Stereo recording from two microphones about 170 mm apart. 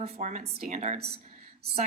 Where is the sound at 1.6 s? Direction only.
70° right (ahead or behind).